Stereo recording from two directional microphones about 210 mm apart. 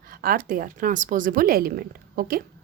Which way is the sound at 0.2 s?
45° right (ahead or behind).